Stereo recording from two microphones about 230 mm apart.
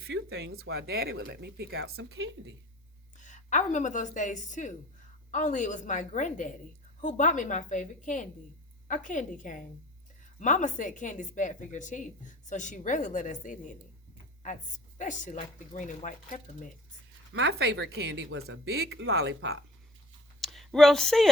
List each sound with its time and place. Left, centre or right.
0.0 s speech: right
2.0 s speech: right
3.2 s a woman's voice: left
17.3 s speech: right
18.6 s speech: right
18.9 s speech: right
20.4 s a sound: centre